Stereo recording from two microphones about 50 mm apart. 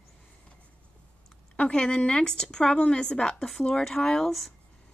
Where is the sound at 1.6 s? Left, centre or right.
Left.